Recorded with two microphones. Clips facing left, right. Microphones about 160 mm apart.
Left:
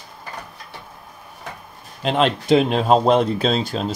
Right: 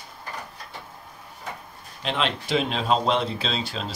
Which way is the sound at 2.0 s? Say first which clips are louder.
Left 8 dB; 45° left (ahead or behind).